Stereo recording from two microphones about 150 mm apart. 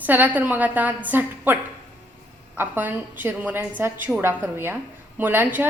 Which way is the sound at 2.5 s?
15° right (ahead or behind).